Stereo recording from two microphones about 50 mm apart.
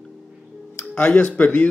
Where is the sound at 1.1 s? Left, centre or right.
Left.